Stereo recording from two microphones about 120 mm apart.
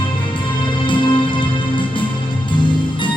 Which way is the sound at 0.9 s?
40° left (ahead or behind).